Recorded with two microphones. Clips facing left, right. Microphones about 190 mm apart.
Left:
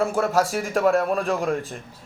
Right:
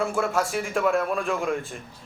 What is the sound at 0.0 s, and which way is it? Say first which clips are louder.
A man's voice: left 3 dB; 40° left (ahead or behind).